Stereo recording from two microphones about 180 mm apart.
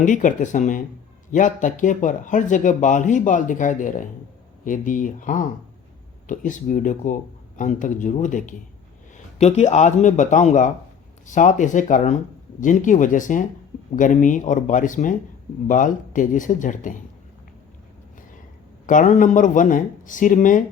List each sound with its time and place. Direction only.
0.0 s speech: 45° left (ahead or behind)
18.9 s speech: 45° left (ahead or behind)